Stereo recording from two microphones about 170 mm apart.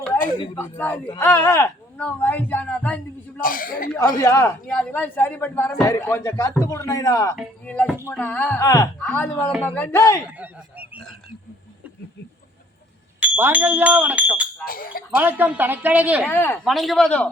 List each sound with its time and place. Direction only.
0.5 s speech: 10° left (ahead or behind)
3.4 s speech: 55° left (ahead or behind)
3.9 s speech: 20° left (ahead or behind)
4.6 s speech: 10° left (ahead or behind)
7.3 s speech: 5° left (ahead or behind)
8.6 s speech: 20° left (ahead or behind)
9.0 s speech: 10° left (ahead or behind)
10.2 s speech: 10° right (ahead or behind)
13.1 s speech: 10° right (ahead or behind)
14.6 s speech: 55° left (ahead or behind)
15.1 s a man's voice: 10° right (ahead or behind)
16.2 s speech: 10° left (ahead or behind)
16.6 s a man's voice: centre (ahead or behind)